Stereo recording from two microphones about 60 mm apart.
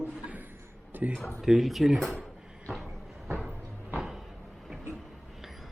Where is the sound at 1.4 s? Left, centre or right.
Centre.